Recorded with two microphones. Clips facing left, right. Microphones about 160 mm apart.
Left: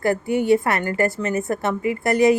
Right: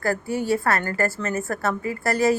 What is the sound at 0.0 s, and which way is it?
A woman's voice, 20° left (ahead or behind).